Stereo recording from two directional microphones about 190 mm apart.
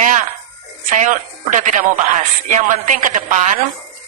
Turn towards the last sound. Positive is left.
turn(degrees=-45)  # may be behind; listen again after turning